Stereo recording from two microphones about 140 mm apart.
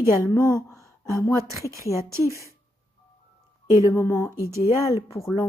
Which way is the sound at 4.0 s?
20° left (ahead or behind).